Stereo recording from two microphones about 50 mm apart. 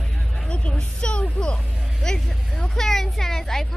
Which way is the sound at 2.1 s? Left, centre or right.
Centre.